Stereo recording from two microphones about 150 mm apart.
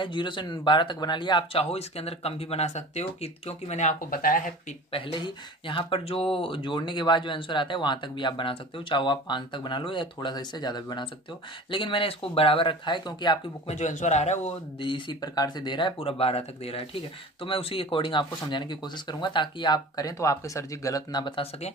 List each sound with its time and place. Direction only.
0.0 s speech: 35° left (ahead or behind); by 4.4 s 70° left (ahead or behind)
4.9 s speech: 35° left (ahead or behind)
13.7 s speech: 50° left (ahead or behind); by 21.5 s 30° left (ahead or behind)